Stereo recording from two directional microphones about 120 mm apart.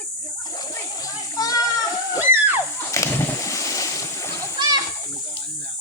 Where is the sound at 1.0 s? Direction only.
30° left (ahead or behind).